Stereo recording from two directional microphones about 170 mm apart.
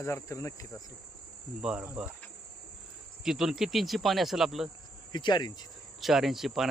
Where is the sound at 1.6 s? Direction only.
5° right (ahead or behind).